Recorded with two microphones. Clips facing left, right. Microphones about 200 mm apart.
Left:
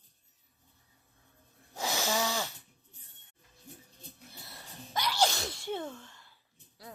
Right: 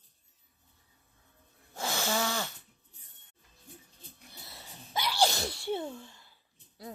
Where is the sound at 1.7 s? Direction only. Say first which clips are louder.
Even; 15° left (ahead or behind).